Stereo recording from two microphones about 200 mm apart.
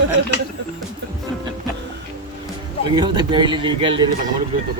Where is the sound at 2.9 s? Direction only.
20° right (ahead or behind).